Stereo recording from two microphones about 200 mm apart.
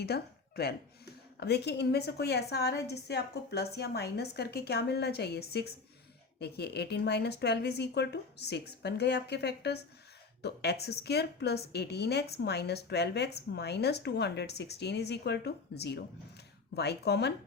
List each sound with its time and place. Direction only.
0.0 s a woman's voice: 50° left (ahead or behind)